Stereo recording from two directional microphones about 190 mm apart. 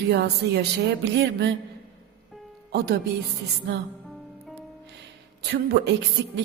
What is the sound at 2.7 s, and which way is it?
Speech, 60° right (ahead or behind).